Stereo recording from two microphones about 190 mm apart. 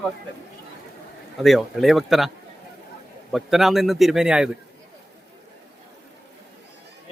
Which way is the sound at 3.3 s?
Centre (ahead or behind).